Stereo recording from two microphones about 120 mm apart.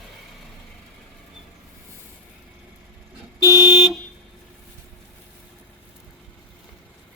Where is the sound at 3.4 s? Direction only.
25° right (ahead or behind).